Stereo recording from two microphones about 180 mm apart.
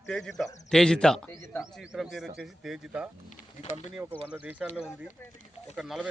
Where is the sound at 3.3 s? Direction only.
40° left (ahead or behind).